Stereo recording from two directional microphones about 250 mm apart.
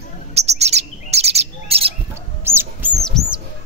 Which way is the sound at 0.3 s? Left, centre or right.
Right.